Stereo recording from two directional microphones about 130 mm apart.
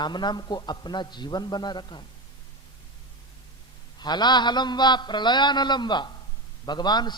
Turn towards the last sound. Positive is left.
turn(degrees=35)  # may be behind; listen again after turning